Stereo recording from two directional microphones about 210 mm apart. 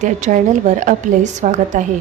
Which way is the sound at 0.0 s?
35° right (ahead or behind).